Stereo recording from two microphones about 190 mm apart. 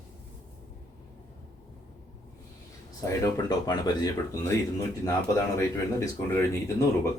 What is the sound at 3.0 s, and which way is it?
Speech, 15° left (ahead or behind).